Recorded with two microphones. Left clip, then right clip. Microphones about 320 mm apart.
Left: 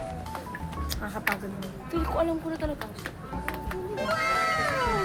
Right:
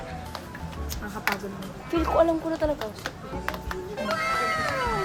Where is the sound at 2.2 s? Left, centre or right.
Centre.